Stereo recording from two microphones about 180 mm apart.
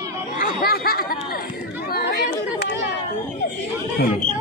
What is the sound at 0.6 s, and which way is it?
Chatter, 55° left (ahead or behind).